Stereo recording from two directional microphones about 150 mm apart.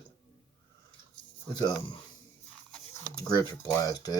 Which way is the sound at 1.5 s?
30° left (ahead or behind).